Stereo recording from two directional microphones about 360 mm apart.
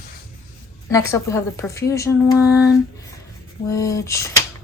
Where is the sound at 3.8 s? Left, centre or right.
Centre.